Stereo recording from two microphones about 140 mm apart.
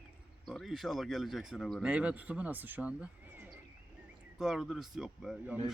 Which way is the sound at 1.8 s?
10° right (ahead or behind).